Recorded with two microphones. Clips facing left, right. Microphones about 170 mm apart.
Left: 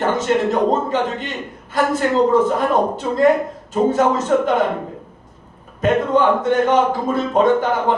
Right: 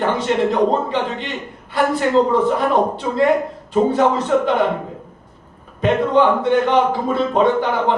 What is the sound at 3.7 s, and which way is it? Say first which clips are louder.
Speech: right 1 dB; 45° left (ahead or behind).